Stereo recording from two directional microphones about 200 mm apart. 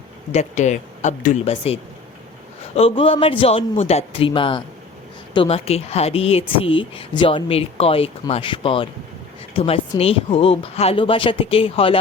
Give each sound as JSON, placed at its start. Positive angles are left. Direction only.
{"t": 0.3, "sound": "speech", "side_deg": 35}